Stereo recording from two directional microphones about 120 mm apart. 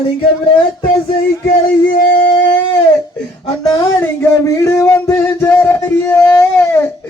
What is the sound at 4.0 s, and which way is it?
Music, 20° left (ahead or behind).